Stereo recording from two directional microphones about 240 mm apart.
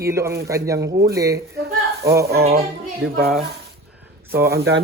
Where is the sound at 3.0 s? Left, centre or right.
Right.